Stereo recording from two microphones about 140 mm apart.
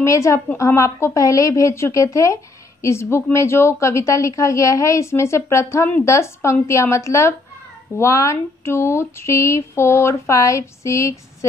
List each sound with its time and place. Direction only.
0.0 s a woman's voice: 20° left (ahead or behind)